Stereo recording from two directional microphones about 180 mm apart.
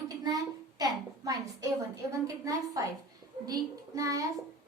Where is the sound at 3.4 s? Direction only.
20° right (ahead or behind).